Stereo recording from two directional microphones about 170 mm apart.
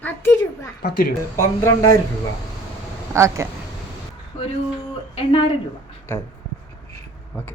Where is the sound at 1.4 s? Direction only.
15° left (ahead or behind).